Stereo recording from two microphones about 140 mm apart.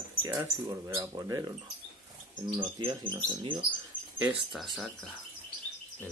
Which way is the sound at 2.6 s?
35° right (ahead or behind).